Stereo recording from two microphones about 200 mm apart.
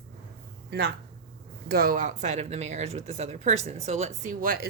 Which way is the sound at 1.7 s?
50° right (ahead or behind).